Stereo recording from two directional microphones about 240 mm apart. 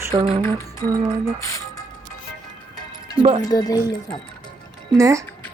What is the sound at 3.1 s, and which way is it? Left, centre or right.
Speech, right.